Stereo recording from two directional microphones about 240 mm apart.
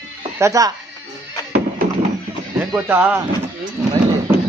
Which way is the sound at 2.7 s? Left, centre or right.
Centre.